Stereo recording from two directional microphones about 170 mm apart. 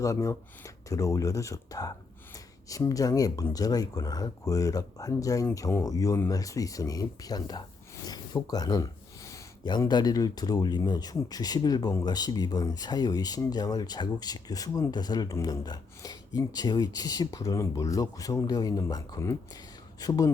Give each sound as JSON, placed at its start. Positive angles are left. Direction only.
{"t": 0.0, "sound": "speech", "side_deg": 20}